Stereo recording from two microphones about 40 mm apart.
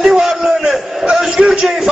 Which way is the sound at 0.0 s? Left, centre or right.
Centre.